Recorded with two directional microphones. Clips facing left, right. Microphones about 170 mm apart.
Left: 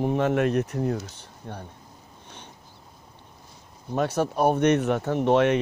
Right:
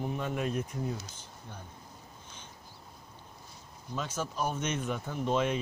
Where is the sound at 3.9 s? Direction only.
65° left (ahead or behind).